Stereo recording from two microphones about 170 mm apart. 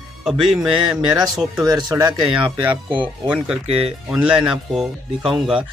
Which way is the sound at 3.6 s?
35° right (ahead or behind).